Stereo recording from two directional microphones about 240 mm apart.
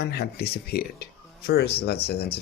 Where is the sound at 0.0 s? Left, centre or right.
Left.